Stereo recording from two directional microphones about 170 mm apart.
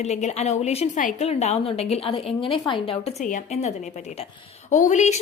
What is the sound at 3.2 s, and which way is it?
A woman's voice, 45° left (ahead or behind).